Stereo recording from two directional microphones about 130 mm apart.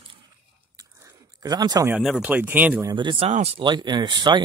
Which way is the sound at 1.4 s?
30° right (ahead or behind).